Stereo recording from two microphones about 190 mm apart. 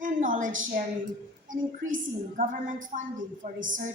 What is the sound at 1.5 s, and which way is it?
A woman's voice, 45° right (ahead or behind).